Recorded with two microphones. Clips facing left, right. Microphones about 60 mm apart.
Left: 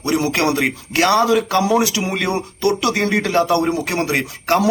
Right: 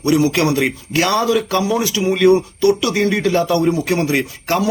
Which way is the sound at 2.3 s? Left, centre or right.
Left.